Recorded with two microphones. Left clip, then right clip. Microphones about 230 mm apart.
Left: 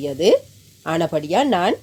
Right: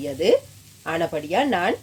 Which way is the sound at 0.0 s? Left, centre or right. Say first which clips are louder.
Left 3 dB; left.